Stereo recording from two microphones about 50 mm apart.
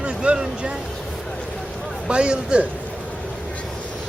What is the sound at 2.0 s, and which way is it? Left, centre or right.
Speech, centre.